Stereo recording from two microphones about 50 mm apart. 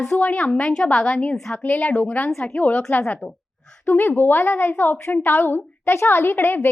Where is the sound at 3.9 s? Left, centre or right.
Left.